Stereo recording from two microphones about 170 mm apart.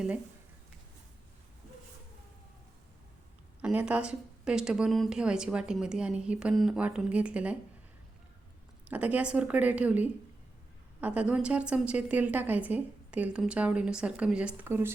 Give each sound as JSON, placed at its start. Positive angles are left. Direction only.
{"t": 3.6, "sound": "speech", "side_deg": -5}
{"t": 8.9, "sound": "a woman's voice", "side_deg": -10}